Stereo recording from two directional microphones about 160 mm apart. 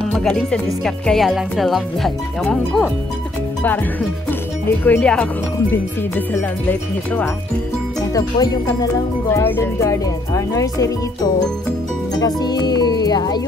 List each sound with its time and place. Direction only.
0.0 s speech: centre (ahead or behind)
4.3 s speech: 10° left (ahead or behind)
8.0 s speech: 20° left (ahead or behind)
12.2 s speech: 25° left (ahead or behind)